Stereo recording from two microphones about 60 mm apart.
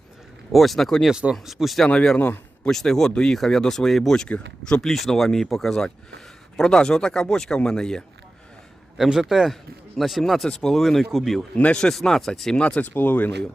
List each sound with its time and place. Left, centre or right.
0.5 s speech: centre
1.1 s speech: centre
2.1 s speech: left
2.6 s speech: centre
9.0 s speech: centre
11.5 s speech: left
11.8 s speech: centre
12.6 s speech: left